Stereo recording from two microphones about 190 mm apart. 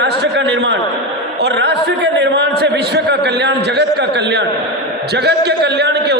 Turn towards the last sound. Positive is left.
turn(degrees=-60)  # may be behind; listen again after turning